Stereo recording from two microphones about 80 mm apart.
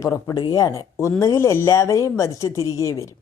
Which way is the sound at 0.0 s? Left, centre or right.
Left.